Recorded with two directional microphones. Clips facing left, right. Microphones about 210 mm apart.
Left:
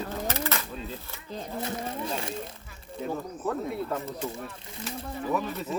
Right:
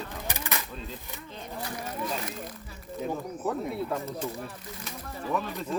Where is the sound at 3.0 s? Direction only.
10° right (ahead or behind).